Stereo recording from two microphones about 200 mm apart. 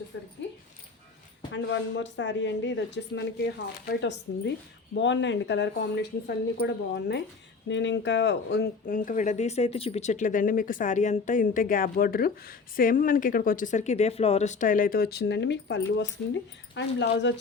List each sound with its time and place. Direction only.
0.1 s speech: 65° left (ahead or behind)
1.5 s a woman's voice: 65° left (ahead or behind)